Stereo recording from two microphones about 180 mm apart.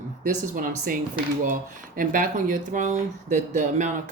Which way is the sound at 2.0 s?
50° right (ahead or behind).